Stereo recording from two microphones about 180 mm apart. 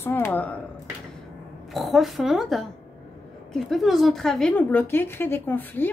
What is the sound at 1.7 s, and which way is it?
A woman's voice, centre (ahead or behind).